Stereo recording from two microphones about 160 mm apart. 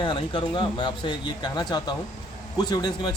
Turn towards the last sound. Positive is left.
turn(degrees=25)  # may be behind; listen again after turning